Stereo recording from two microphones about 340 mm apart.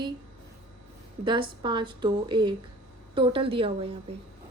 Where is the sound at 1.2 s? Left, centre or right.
Centre.